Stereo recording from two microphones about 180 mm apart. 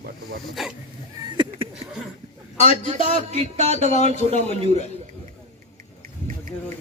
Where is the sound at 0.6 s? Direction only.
Centre (ahead or behind).